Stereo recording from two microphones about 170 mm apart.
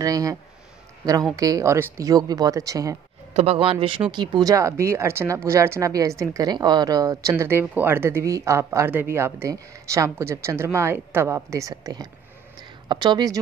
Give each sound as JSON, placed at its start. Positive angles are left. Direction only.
{"t": 0.0, "sound": "speech", "side_deg": -20}
{"t": 3.3, "sound": "speech", "side_deg": -35}